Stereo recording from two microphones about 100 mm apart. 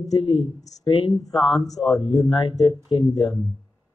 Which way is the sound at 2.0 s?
45° left (ahead or behind).